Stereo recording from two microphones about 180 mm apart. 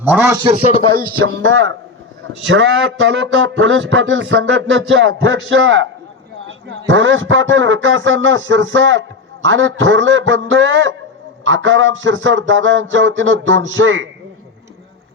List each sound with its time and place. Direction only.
0.0 s a man's voice: 10° right (ahead or behind)
0.6 s music: 35° left (ahead or behind)
2.4 s a man's voice: 90° right